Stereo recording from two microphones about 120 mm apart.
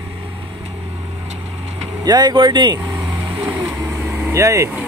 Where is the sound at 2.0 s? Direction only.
35° right (ahead or behind).